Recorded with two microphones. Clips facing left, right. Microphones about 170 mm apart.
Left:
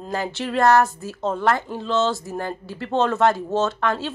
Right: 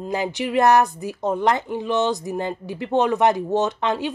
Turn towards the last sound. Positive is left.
turn(degrees=-15)  # may be behind; listen again after turning